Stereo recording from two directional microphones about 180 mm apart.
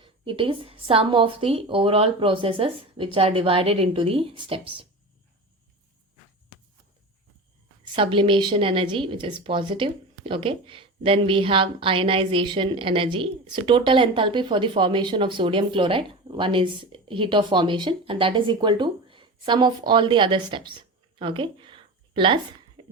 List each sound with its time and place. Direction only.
0.0 s a woman's voice: 30° right (ahead or behind)
7.9 s a woman's voice: 30° right (ahead or behind)
22.8 s a sound: 25° right (ahead or behind)